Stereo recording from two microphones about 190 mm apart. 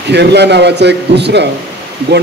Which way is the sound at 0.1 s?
65° right (ahead or behind).